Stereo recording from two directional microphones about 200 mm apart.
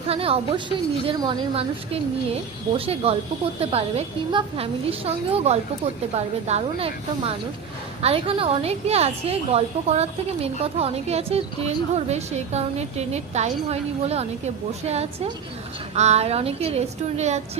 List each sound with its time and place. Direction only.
0.1 s a woman's voice: 30° right (ahead or behind)